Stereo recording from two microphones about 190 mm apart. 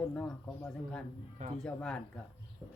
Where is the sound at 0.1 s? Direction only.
5° left (ahead or behind).